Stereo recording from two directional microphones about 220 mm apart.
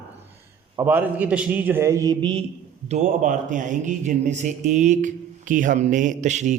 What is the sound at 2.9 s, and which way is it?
A man's voice, 35° right (ahead or behind).